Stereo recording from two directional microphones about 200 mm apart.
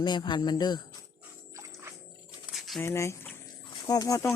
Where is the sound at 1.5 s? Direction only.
15° right (ahead or behind).